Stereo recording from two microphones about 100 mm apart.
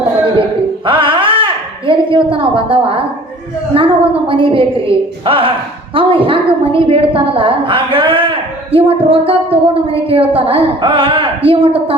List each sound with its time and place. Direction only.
0.9 s music: 60° right (ahead or behind)
1.9 s a sound: 60° right (ahead or behind)
3.7 s a woman's voice: 70° right (ahead or behind)
4.3 s a woman's voice: 60° right (ahead or behind)